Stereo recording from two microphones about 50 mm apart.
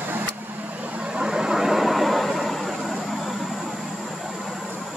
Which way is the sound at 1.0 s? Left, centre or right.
Centre.